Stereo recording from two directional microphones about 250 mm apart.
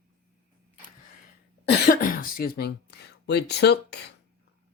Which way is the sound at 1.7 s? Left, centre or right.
Left.